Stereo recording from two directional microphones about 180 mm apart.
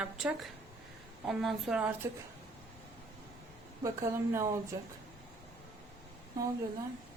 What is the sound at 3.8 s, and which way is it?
Speech, 15° right (ahead or behind).